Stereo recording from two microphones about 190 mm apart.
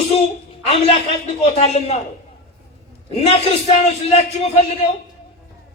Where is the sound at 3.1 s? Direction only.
30° left (ahead or behind).